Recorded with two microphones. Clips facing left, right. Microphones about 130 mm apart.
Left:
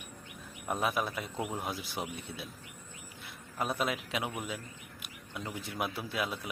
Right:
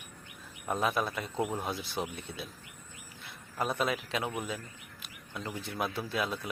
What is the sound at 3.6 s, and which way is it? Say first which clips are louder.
A man's voice: right 2 dB; 5° left (ahead or behind).